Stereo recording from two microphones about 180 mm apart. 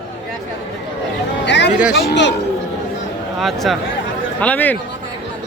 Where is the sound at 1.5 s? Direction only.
75° left (ahead or behind).